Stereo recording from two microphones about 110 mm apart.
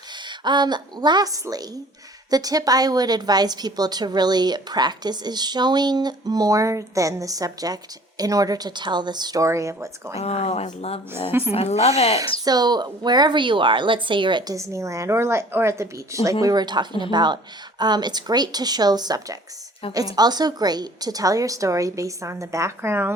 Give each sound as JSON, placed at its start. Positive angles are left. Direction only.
{"t": 0.3, "sound": "a woman's voice", "side_deg": -45}
{"t": 10.2, "sound": "speech", "side_deg": 70}
{"t": 11.3, "sound": "a woman's voice", "side_deg": -20}
{"t": 11.5, "sound": "speech", "side_deg": 75}
{"t": 12.5, "sound": "a woman's voice", "side_deg": -40}
{"t": 14.5, "sound": "a woman's voice", "side_deg": -25}